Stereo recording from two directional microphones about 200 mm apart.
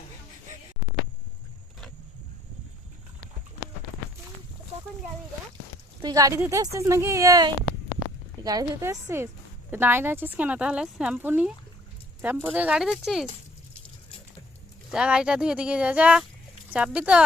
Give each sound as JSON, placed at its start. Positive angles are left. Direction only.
{"t": 6.0, "sound": "a woman's voice", "side_deg": -20}
{"t": 14.8, "sound": "speech", "side_deg": -5}